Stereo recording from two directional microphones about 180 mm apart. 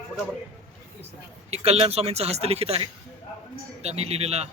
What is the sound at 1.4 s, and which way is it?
A man's voice, 35° right (ahead or behind).